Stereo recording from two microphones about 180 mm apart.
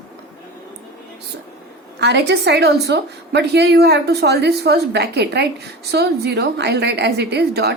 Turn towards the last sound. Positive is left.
turn(degrees=-65)  # may be behind; listen again after turning